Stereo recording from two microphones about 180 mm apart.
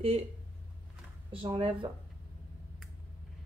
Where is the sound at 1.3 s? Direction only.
30° right (ahead or behind).